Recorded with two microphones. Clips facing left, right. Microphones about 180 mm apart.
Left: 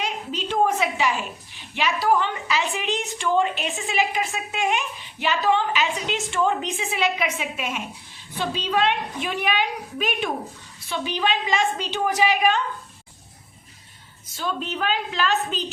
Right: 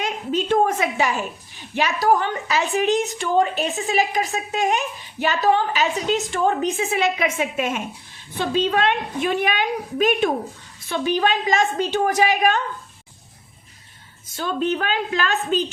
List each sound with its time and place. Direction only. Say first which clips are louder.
0.0 s a woman's voice: right 5 dB; 50° right (ahead or behind)
14.3 s a woman's voice: right 6 dB; 50° right (ahead or behind)